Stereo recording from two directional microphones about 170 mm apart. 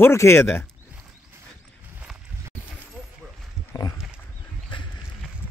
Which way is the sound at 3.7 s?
25° left (ahead or behind).